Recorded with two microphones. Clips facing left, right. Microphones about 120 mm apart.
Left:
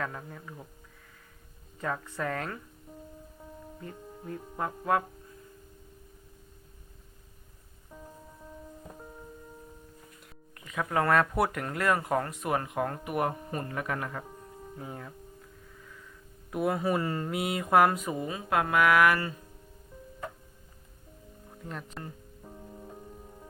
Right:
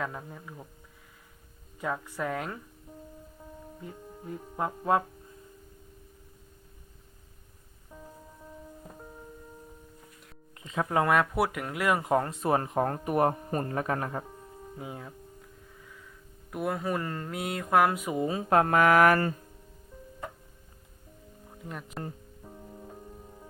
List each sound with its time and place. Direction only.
0.0 s speech: 10° right (ahead or behind)
1.8 s speech: 10° right (ahead or behind)
3.8 s music: 5° right (ahead or behind)
4.3 s speech: 5° right (ahead or behind)
7.9 s music: centre (ahead or behind)
10.6 s speech: 25° right (ahead or behind)
14.3 s music: centre (ahead or behind)
14.8 s speech: 10° right (ahead or behind)
16.5 s speech: centre (ahead or behind)
18.0 s speech: 15° right (ahead or behind)
18.3 s speech: 35° right (ahead or behind)
21.6 s speech: 10° right (ahead or behind)
22.4 s music: centre (ahead or behind)